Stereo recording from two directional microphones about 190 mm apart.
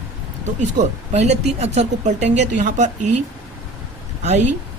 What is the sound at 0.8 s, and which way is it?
Speech, 35° right (ahead or behind).